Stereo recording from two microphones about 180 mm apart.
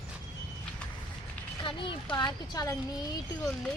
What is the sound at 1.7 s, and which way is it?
Speech, 30° left (ahead or behind).